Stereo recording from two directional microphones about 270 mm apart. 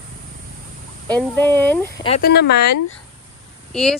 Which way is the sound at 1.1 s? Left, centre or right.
Centre.